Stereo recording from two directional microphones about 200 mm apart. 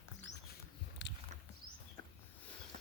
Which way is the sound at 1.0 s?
60° left (ahead or behind).